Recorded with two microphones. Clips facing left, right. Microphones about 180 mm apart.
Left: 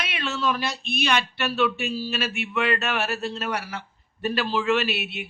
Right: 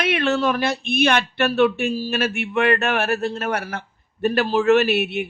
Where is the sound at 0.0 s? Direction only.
55° right (ahead or behind).